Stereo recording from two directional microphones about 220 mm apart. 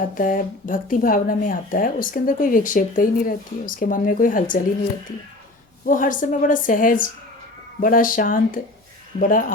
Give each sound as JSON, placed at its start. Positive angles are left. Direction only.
{"t": 0.1, "sound": "speech", "side_deg": 40}
{"t": 5.8, "sound": "speech", "side_deg": 35}